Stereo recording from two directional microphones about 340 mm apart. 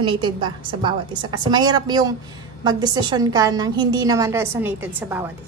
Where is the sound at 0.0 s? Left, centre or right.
Centre.